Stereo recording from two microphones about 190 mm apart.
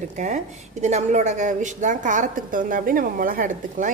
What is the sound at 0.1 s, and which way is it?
A woman's voice, 40° right (ahead or behind).